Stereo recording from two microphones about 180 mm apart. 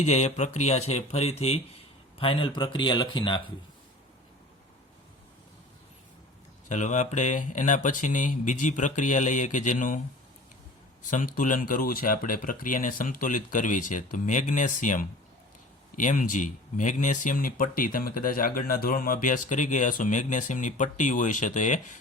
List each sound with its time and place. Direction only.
0.0 s speech: 40° left (ahead or behind)
6.7 s speech: 40° left (ahead or behind)
11.0 s speech: 45° left (ahead or behind)